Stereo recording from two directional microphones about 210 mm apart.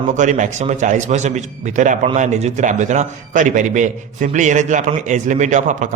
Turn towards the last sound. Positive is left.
turn(degrees=-35)  # may be behind; listen again after turning